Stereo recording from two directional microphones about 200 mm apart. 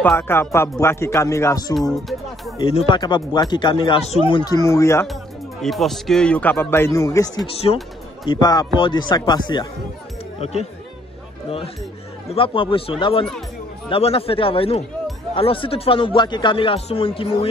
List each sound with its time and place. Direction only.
0.0 s speech: 10° left (ahead or behind)
1.8 s speech: centre (ahead or behind)
2.6 s speech: 25° left (ahead or behind)
5.6 s speech: centre (ahead or behind); by 7.4 s 15° left (ahead or behind)
7.5 s speech: 30° left (ahead or behind)
12.4 s speech: 25° left (ahead or behind)